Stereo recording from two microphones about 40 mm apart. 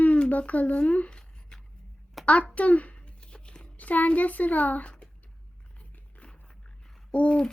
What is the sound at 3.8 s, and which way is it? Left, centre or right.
Speech, left.